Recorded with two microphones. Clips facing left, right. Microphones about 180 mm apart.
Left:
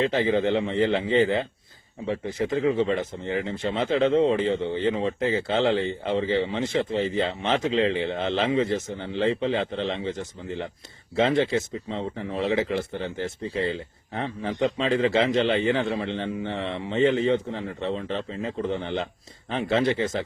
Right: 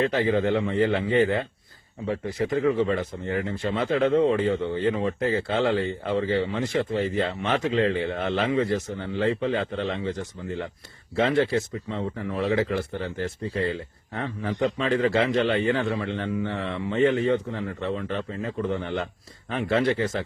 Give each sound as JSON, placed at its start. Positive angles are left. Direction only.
{"t": 0.0, "sound": "speech", "side_deg": 20}